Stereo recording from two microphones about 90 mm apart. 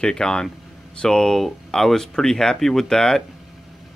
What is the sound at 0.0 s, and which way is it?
Speech, 10° left (ahead or behind).